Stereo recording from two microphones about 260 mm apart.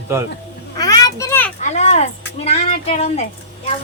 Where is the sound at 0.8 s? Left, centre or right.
Centre.